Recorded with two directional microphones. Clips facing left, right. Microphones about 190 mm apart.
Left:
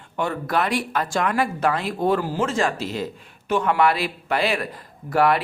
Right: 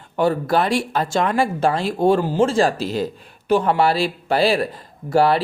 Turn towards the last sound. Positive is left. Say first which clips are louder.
# right 3 dB
turn(degrees=-30)  # may be behind; listen again after turning